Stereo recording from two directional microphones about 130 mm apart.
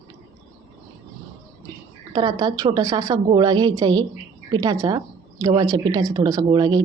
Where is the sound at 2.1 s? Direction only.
35° right (ahead or behind).